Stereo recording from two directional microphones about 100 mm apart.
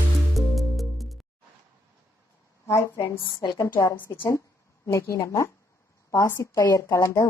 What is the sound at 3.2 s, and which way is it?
Speech, 45° left (ahead or behind).